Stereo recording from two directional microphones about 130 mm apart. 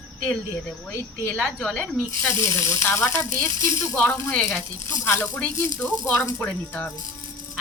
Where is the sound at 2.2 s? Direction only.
25° left (ahead or behind).